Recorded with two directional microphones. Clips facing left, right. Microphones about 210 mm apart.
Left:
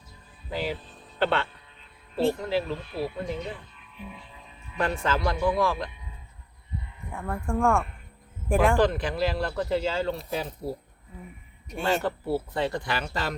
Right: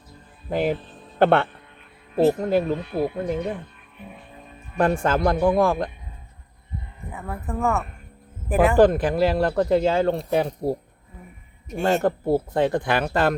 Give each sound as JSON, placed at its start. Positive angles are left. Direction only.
{"t": 0.5, "sound": "speech", "side_deg": -50}
{"t": 7.1, "sound": "speech", "side_deg": -5}
{"t": 8.8, "sound": "speech", "side_deg": -50}
{"t": 11.8, "sound": "speech", "side_deg": -45}